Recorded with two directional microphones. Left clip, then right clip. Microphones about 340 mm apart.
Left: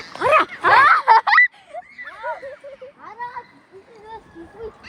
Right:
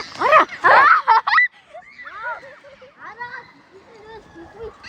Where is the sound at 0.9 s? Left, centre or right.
Centre.